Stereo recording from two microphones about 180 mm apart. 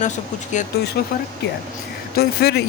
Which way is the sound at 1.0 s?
60° left (ahead or behind).